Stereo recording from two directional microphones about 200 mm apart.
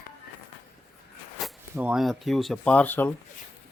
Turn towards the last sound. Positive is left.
turn(degrees=10)  # may be behind; listen again after turning